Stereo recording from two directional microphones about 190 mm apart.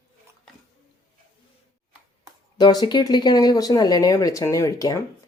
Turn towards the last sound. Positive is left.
turn(degrees=15)  # may be behind; listen again after turning